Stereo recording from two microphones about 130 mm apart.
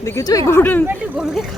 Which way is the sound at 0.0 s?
25° left (ahead or behind).